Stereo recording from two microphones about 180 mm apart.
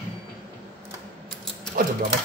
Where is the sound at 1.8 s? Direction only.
55° right (ahead or behind).